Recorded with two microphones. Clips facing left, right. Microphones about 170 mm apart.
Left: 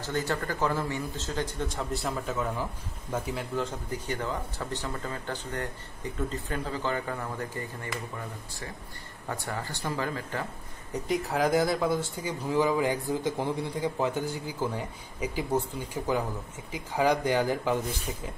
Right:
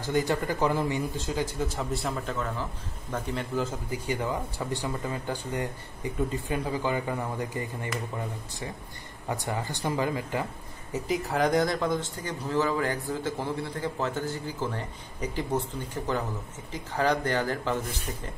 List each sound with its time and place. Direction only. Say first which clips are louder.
0.0 s a man's voice: right 4 dB; 15° right (ahead or behind)
9.3 s a man's voice: right 3 dB; 15° right (ahead or behind)
10.9 s speech: even; centre (ahead or behind)